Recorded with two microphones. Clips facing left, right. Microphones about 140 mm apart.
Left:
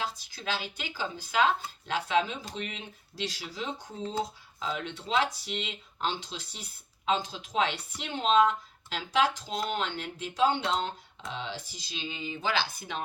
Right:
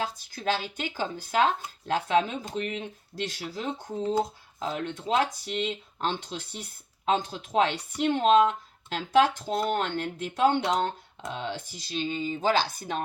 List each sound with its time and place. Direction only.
0.0 s speech: 50° right (ahead or behind)